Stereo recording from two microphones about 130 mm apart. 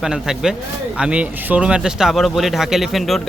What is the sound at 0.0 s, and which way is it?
Speech, 5° right (ahead or behind).